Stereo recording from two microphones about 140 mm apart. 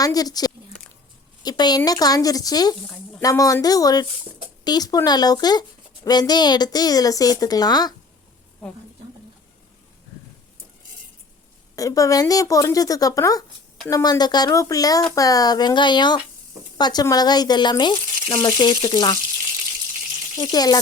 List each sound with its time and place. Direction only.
0.0 s a woman's voice: 25° left (ahead or behind)
11.8 s a woman's voice: 25° left (ahead or behind)
20.3 s a woman's voice: 30° left (ahead or behind)